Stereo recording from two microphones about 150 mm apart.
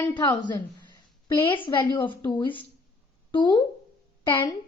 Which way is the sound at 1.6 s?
30° left (ahead or behind).